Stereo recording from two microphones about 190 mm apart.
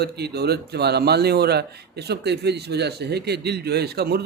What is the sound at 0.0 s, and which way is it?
Speech, 60° right (ahead or behind).